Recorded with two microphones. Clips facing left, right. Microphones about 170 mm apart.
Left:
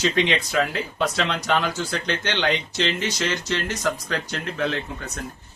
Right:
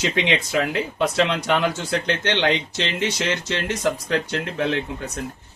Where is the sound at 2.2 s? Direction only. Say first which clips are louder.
Right 3 dB; 25° right (ahead or behind).